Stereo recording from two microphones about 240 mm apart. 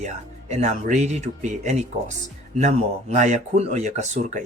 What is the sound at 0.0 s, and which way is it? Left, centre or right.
Speech, right.